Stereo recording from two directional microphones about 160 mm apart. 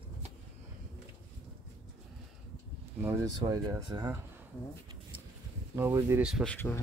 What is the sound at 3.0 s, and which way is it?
Speech, 15° right (ahead or behind).